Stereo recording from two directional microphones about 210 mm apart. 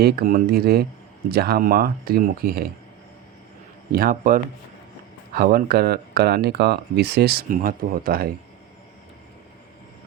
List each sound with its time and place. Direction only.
0.0 s speech: 45° right (ahead or behind)
3.9 s a man's voice: 40° right (ahead or behind)